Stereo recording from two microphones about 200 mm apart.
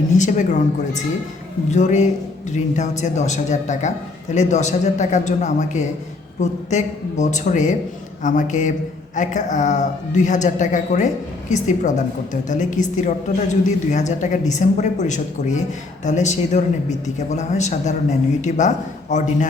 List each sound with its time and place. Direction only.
0.2 s a woman's voice: 40° left (ahead or behind)
1.7 s a woman's voice: 35° left (ahead or behind)